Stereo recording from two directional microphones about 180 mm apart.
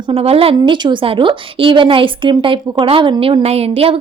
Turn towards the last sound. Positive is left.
turn(degrees=-35)  # may be behind; listen again after turning